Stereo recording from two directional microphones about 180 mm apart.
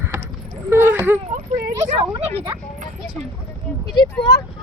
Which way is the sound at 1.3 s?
55° right (ahead or behind).